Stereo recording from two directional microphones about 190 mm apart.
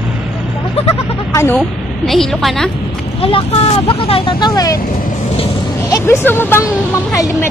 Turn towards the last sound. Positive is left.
turn(degrees=15)  # may be behind; listen again after turning